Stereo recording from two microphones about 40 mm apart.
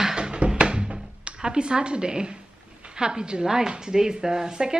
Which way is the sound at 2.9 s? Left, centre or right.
Centre.